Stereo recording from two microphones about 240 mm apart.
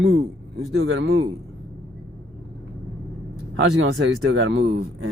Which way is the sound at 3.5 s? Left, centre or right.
Right.